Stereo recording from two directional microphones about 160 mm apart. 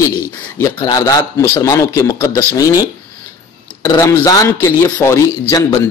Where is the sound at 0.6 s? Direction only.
20° left (ahead or behind).